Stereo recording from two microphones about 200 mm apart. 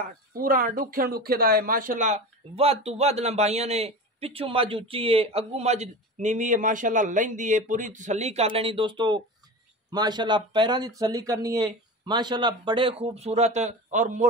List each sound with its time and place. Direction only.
0.3 s speech: 45° right (ahead or behind)